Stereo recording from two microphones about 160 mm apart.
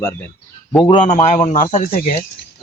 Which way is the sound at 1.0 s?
50° left (ahead or behind).